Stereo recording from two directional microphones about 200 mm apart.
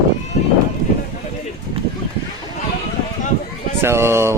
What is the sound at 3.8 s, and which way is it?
Speech, 10° right (ahead or behind).